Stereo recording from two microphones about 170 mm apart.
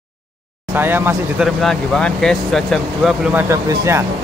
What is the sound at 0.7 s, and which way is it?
Speech, 10° right (ahead or behind).